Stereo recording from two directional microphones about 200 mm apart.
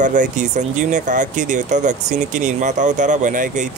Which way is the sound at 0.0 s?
40° right (ahead or behind).